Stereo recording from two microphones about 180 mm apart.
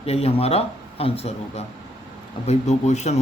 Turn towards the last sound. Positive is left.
turn(degrees=40)  # may be behind; listen again after turning